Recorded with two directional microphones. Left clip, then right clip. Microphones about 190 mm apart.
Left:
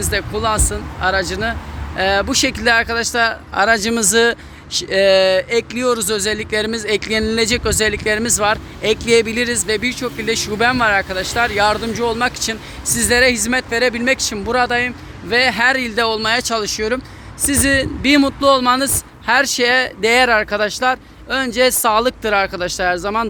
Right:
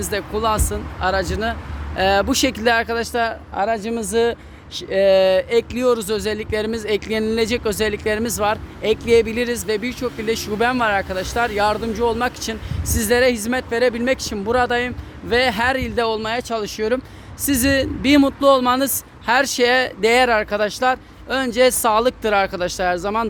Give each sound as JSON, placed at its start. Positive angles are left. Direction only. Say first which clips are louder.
{"t": 0.0, "sound": "speech", "louder": "left 2 dB", "side_deg": -20}